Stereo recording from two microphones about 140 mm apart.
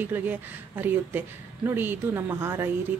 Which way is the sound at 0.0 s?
15° right (ahead or behind).